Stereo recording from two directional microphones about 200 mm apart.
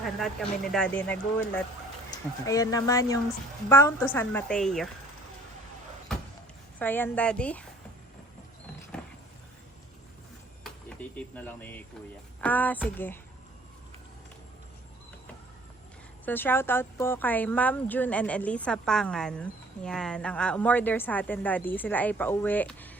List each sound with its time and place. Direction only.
0.0 s speech: centre (ahead or behind)
2.5 s a woman's voice: 15° left (ahead or behind)
6.7 s a woman's voice: 10° left (ahead or behind)
10.6 s a woman's voice: 5° left (ahead or behind)
16.2 s a woman's voice: 10° left (ahead or behind)